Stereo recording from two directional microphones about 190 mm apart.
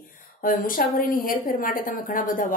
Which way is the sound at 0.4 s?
45° left (ahead or behind).